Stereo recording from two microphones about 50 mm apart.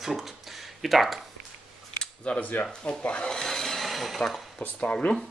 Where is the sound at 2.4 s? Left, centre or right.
Left.